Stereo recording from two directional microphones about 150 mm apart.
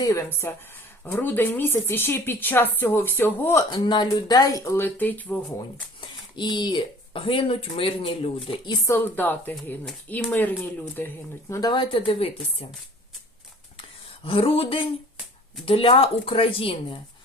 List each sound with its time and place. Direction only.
0.0 s speech: 20° left (ahead or behind)
3.7 s speech: 30° left (ahead or behind); by 5.4 s 10° left (ahead or behind)
6.3 s speech: 30° left (ahead or behind)
8.9 s speech: 10° left (ahead or behind); by 12.6 s 40° left (ahead or behind)
14.3 s speech: 40° left (ahead or behind)